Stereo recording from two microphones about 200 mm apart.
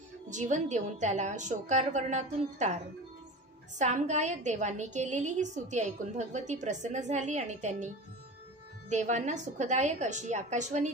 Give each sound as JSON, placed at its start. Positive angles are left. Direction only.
{"t": 0.3, "sound": "a woman's voice", "side_deg": -35}
{"t": 3.7, "sound": "a woman's voice", "side_deg": -35}